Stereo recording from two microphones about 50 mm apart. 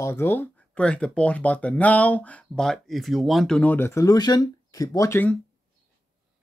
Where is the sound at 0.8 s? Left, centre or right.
Centre.